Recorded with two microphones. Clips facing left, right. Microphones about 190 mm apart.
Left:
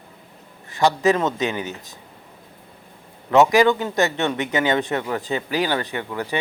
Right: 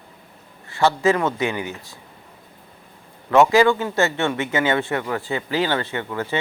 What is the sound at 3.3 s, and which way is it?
A man's voice, 15° left (ahead or behind).